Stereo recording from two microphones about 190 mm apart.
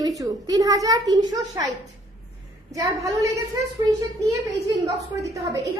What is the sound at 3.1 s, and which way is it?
Speech, 15° right (ahead or behind).